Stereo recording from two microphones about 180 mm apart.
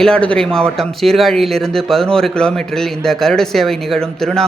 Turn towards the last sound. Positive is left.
turn(degrees=5)  # may be behind; listen again after turning